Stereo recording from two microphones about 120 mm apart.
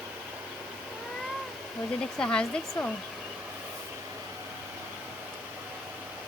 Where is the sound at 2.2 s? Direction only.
5° left (ahead or behind).